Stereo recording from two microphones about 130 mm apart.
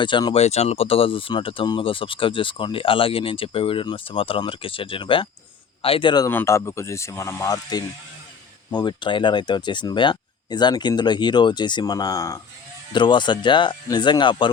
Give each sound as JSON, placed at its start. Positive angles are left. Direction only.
{"t": 0.0, "sound": "speech", "side_deg": 35}
{"t": 0.3, "sound": "speech", "side_deg": 55}
{"t": 6.2, "sound": "speech", "side_deg": 20}
{"t": 12.9, "sound": "speech", "side_deg": 35}